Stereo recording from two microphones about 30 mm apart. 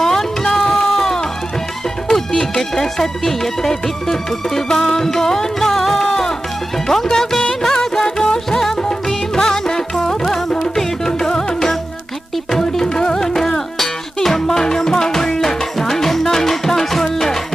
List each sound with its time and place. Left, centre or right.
0.0 s music: centre
2.0 s speech: centre
7.6 s music: centre